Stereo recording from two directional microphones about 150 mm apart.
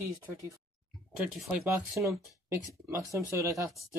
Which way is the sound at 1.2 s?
5° right (ahead or behind).